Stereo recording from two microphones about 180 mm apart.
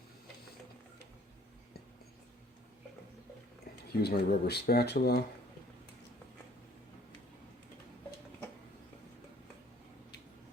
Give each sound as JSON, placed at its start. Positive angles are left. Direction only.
{"t": 4.0, "sound": "speech", "side_deg": 60}